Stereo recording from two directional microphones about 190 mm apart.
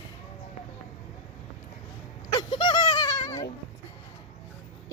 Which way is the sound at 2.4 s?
25° left (ahead or behind).